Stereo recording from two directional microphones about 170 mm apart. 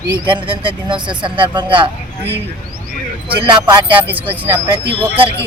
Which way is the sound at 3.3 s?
25° right (ahead or behind).